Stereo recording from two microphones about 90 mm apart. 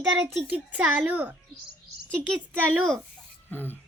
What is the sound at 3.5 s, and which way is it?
Speech, 20° left (ahead or behind).